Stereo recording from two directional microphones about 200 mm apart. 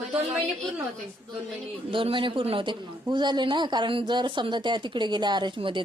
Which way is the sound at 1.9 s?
25° right (ahead or behind).